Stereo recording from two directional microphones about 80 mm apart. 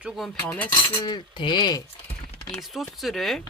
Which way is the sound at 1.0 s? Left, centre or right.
Left.